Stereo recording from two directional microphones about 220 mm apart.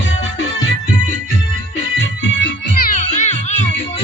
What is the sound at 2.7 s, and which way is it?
Music, 40° left (ahead or behind).